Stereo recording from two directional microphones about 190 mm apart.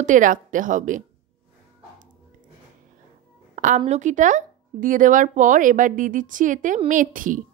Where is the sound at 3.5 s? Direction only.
40° right (ahead or behind).